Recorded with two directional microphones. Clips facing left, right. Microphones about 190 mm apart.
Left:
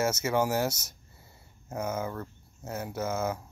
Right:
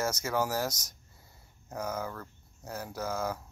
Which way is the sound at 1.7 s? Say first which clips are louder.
Left 3 dB; 5° left (ahead or behind).